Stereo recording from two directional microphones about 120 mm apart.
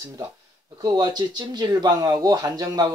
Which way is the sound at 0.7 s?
35° right (ahead or behind).